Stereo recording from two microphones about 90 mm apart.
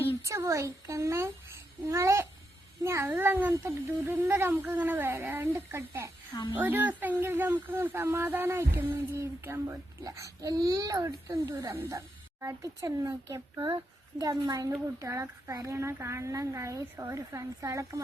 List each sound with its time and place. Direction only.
0.2 s a woman's voice: 35° right (ahead or behind)